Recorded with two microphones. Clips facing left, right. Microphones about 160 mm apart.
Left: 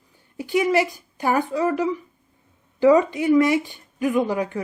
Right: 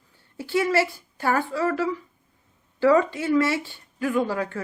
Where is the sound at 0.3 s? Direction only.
15° left (ahead or behind).